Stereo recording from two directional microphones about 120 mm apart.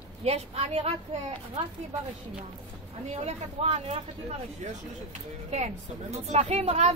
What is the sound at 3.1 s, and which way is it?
Speech, 65° right (ahead or behind).